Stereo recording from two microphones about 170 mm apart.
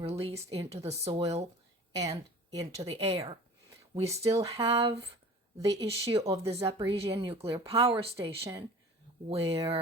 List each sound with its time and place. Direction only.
0.0 s speech: 35° right (ahead or behind)
2.0 s a woman's voice: 20° right (ahead or behind)
5.5 s a woman's voice: 20° right (ahead or behind)
5.8 s speech: 35° right (ahead or behind)
6.2 s a woman's voice: 20° right (ahead or behind)
6.5 s speech: 35° right (ahead or behind)
8.1 s a woman's voice: 20° right (ahead or behind)
9.3 s speech: 35° right (ahead or behind)